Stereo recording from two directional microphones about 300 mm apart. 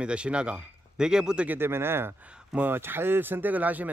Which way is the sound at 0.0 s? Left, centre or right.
Centre.